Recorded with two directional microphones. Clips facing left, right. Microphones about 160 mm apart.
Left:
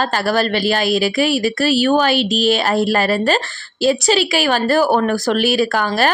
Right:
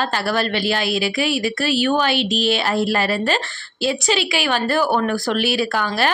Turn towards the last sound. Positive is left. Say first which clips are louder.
# left 4 dB
turn(degrees=45)  # may be behind; listen again after turning